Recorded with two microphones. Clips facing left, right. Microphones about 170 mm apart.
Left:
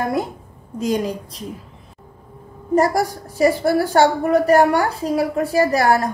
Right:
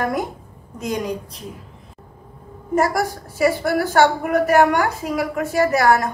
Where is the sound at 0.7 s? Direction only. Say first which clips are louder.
Left 4 dB; 30° left (ahead or behind).